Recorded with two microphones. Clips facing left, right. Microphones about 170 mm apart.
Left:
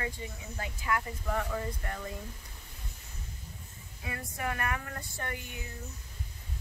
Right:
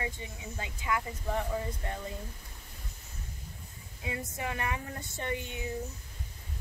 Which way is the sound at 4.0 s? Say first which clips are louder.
Right 1 dB; 20° right (ahead or behind).